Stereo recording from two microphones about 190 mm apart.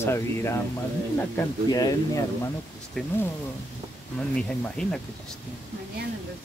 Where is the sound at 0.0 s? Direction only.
15° left (ahead or behind).